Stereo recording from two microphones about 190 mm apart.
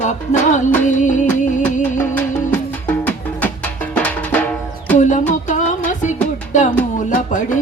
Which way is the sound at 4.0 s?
5° left (ahead or behind).